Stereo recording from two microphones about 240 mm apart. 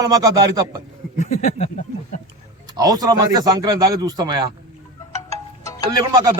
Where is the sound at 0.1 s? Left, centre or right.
Centre.